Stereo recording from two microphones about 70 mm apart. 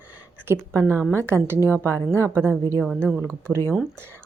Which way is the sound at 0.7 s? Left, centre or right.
Centre.